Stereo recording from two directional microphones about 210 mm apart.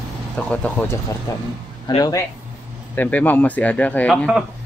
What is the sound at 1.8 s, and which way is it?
Speech, 20° left (ahead or behind).